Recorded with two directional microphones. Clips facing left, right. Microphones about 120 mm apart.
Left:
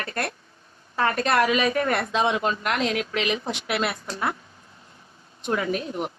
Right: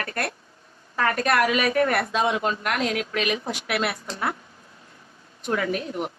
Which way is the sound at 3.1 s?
25° left (ahead or behind).